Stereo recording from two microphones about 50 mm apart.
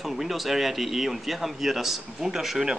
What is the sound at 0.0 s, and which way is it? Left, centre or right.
Speech, centre.